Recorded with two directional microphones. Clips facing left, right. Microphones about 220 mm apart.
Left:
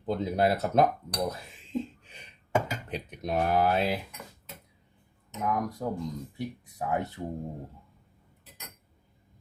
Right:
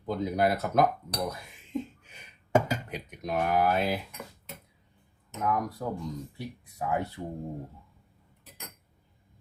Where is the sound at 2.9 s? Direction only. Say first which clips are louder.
Left 1 dB; 30° left (ahead or behind).